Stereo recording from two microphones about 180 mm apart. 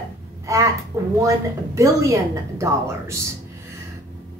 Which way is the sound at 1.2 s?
15° right (ahead or behind).